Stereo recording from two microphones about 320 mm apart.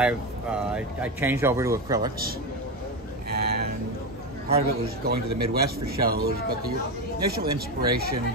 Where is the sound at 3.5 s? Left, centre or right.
Right.